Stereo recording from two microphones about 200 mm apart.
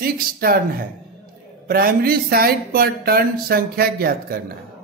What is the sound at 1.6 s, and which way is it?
Speech, 45° right (ahead or behind).